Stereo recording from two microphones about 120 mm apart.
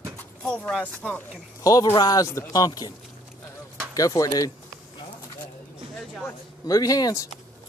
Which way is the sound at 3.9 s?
30° left (ahead or behind).